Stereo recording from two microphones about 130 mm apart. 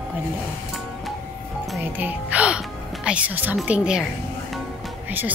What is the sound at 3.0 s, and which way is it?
A woman's voice, 10° right (ahead or behind).